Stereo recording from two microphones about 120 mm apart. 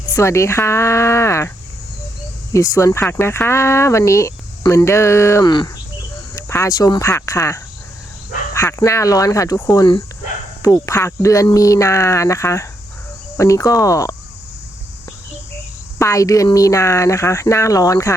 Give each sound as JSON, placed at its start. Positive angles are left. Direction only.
{"t": 0.1, "sound": "speech", "side_deg": 25}
{"t": 2.5, "sound": "speech", "side_deg": 25}
{"t": 5.5, "sound": "cricket", "side_deg": 40}
{"t": 6.3, "sound": "speech", "side_deg": 25}
{"t": 10.8, "sound": "speech", "side_deg": 25}
{"t": 16.0, "sound": "speech", "side_deg": 25}